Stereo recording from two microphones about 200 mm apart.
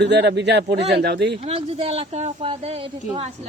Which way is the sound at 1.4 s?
30° right (ahead or behind).